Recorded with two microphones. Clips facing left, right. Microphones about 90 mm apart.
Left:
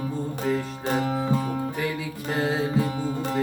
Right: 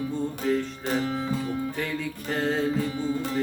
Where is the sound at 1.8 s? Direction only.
5° left (ahead or behind).